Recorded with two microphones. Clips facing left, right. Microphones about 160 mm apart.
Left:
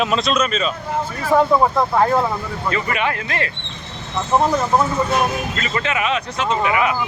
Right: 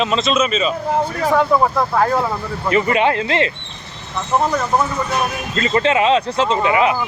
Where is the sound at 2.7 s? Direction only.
25° right (ahead or behind).